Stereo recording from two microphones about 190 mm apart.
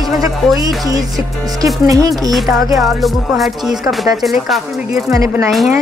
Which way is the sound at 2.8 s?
Centre (ahead or behind).